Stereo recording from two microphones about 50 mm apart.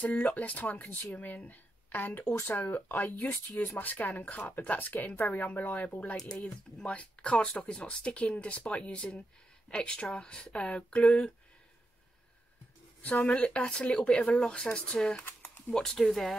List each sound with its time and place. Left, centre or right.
0.0 s speech: left
6.1 s speech: centre
6.4 s speech: left
13.0 s speech: left
15.7 s speech: centre